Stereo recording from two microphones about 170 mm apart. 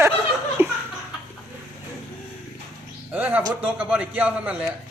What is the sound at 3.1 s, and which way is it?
A man's voice, 10° right (ahead or behind).